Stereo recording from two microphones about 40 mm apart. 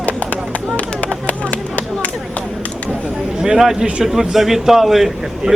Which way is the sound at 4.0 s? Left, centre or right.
Centre.